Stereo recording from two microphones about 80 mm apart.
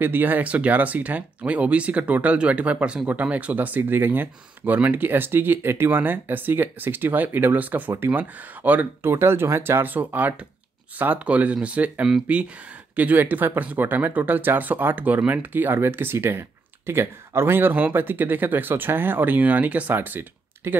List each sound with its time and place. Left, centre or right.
0.0 s speech: right